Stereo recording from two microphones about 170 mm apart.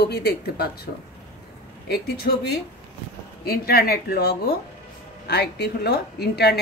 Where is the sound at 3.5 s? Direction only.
65° left (ahead or behind).